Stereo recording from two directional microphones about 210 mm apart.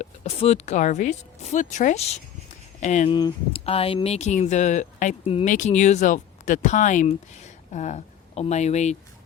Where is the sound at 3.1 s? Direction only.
20° left (ahead or behind).